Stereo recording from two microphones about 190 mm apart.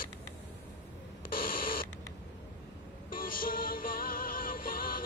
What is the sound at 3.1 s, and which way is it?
Music, 50° left (ahead or behind).